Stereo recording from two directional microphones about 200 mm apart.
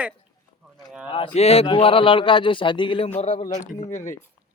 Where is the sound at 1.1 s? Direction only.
25° left (ahead or behind).